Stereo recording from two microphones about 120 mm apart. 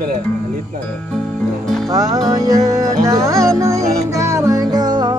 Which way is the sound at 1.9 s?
30° right (ahead or behind).